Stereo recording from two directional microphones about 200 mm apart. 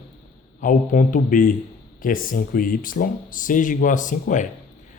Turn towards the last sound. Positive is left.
turn(degrees=40)  # may be behind; listen again after turning